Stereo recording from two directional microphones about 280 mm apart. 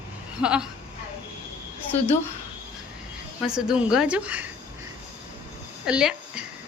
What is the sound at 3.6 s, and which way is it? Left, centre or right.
Speech, centre.